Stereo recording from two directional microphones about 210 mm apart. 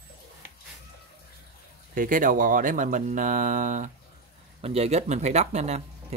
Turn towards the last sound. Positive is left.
turn(degrees=-30)  # may be behind; listen again after turning